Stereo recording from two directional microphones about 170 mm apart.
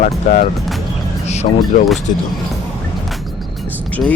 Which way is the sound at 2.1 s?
45° left (ahead or behind).